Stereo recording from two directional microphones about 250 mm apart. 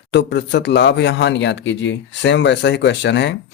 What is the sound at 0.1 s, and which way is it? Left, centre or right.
Speech, left.